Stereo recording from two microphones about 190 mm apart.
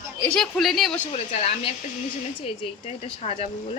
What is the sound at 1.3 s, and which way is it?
Speech, 35° left (ahead or behind).